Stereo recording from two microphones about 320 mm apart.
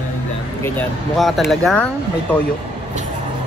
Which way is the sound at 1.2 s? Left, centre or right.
Centre.